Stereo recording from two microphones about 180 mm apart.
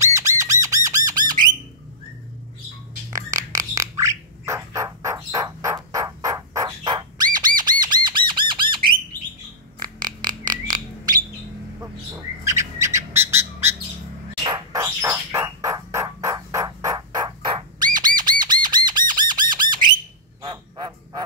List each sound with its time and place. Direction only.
0.0 s squawk: 15° right (ahead or behind)
3.1 s bird: 20° right (ahead or behind)
7.3 s squawk: 20° right (ahead or behind)
9.8 s a sound: 25° right (ahead or behind)
12.8 s bird: 15° right (ahead or behind)
19.5 s squawk: 25° right (ahead or behind)
20.4 s a sound: 25° right (ahead or behind)